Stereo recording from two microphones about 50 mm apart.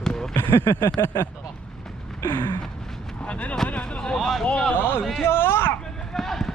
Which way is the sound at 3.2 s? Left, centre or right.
Left.